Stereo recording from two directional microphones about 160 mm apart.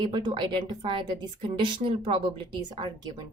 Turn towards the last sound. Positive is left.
turn(degrees=-25)  # may be behind; listen again after turning